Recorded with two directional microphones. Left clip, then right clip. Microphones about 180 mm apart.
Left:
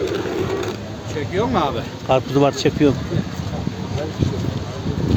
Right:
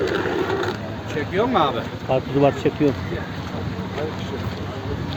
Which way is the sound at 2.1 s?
30° left (ahead or behind).